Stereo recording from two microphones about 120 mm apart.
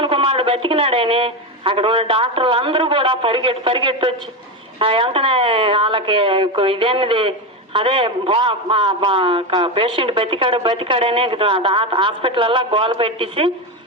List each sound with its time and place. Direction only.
0.0 s speech: 50° right (ahead or behind)